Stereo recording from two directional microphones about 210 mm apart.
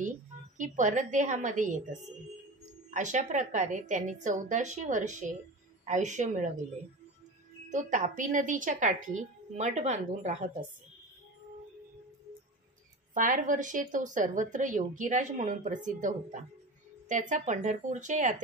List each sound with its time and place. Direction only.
0.6 s a woman's voice: 35° right (ahead or behind)
7.7 s a woman's voice: 35° right (ahead or behind)
13.1 s a woman's voice: 40° right (ahead or behind)